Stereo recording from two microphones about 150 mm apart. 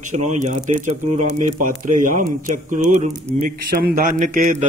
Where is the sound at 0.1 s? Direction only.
50° right (ahead or behind).